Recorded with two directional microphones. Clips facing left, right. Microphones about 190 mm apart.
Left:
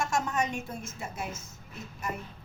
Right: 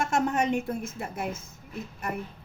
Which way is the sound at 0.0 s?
60° right (ahead or behind).